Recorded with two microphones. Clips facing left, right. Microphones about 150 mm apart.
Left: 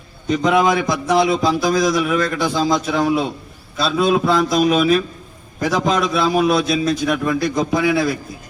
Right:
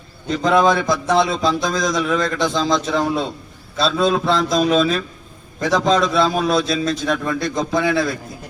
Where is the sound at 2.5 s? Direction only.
5° left (ahead or behind).